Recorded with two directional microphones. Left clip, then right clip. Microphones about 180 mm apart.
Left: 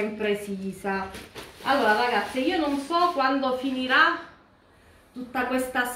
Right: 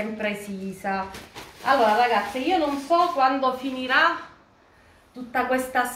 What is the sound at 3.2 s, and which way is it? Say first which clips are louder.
Speech: right 3 dB; 25° right (ahead or behind).